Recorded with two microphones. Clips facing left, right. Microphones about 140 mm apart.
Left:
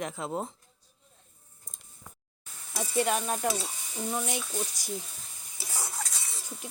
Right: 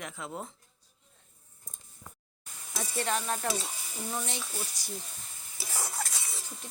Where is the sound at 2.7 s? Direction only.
10° left (ahead or behind).